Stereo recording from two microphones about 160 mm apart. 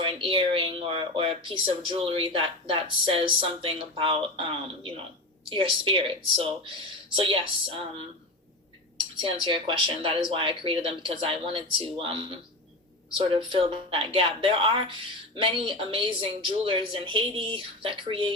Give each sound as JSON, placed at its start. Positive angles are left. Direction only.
{"t": 0.0, "sound": "speech", "side_deg": -30}
{"t": 9.5, "sound": "speech", "side_deg": -30}